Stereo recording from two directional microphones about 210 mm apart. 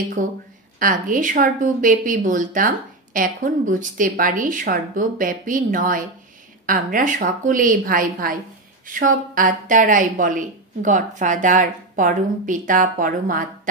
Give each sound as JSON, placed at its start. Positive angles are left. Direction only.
{"t": 0.2, "sound": "a woman's voice", "side_deg": -40}